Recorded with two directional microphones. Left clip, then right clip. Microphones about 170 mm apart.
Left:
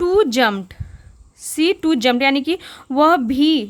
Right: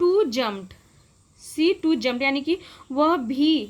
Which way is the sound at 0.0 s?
50° left (ahead or behind).